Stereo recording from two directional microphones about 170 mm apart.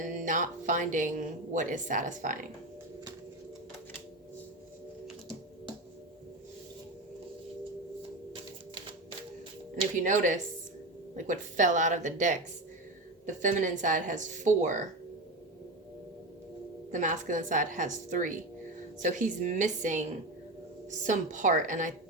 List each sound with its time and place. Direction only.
0.0 s a woman's voice: 50° right (ahead or behind)
10.0 s a woman's voice: 50° right (ahead or behind)
16.9 s a woman's voice: 50° right (ahead or behind)